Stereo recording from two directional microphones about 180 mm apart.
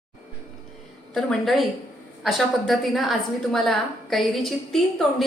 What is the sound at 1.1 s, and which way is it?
A woman's voice, centre (ahead or behind).